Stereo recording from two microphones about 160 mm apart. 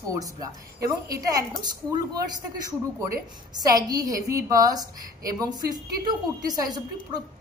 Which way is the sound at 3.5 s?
25° right (ahead or behind).